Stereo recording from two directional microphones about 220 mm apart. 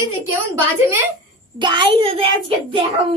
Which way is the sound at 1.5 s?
20° right (ahead or behind).